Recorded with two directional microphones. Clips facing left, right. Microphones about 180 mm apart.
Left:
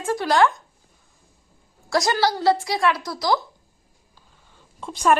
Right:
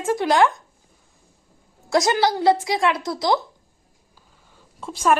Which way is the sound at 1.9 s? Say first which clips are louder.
Right 2 dB; 20° right (ahead or behind).